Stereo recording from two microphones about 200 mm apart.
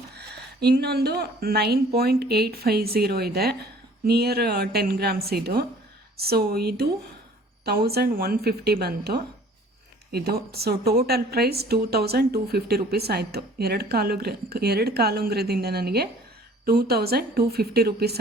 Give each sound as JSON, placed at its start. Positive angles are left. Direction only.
{"t": 0.1, "sound": "speech", "side_deg": -55}